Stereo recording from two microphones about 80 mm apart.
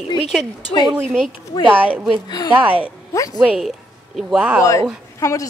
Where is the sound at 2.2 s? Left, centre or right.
Left.